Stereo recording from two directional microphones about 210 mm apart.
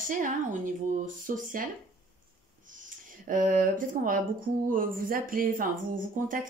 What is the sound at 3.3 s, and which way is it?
Speech, 40° right (ahead or behind).